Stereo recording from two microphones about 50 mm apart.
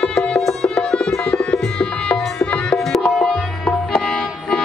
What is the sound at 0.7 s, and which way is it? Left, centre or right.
Music, centre.